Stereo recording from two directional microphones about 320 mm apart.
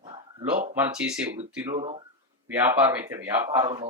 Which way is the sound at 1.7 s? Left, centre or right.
Centre.